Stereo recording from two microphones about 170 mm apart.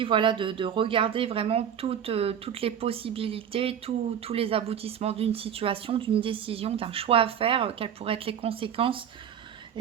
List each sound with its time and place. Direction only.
0.0 s speech: 30° right (ahead or behind)